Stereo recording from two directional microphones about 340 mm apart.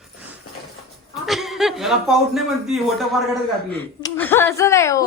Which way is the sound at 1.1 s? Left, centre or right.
Centre.